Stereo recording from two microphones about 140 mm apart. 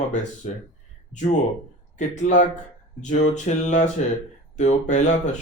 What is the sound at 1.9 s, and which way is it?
Speech, 55° left (ahead or behind).